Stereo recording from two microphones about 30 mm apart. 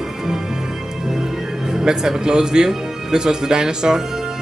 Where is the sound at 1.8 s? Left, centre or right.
Right.